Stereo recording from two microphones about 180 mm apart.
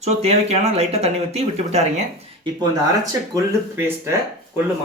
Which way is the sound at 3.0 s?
20° right (ahead or behind).